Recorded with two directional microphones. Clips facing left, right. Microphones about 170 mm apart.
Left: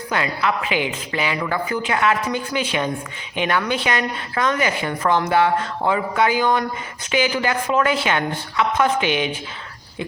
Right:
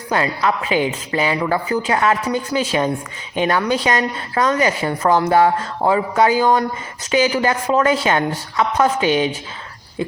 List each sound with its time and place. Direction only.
0.1 s a woman's voice: 35° right (ahead or behind)